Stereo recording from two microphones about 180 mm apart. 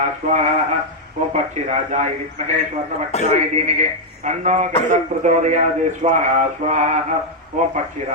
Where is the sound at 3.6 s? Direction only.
40° right (ahead or behind).